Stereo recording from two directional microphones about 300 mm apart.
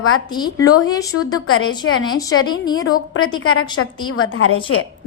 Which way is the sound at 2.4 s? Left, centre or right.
Centre.